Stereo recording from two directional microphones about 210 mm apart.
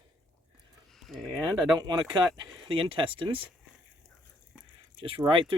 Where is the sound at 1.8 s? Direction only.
20° right (ahead or behind).